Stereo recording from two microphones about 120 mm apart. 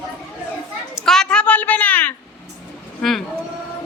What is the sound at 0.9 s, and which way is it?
A woman's voice, 5° left (ahead or behind).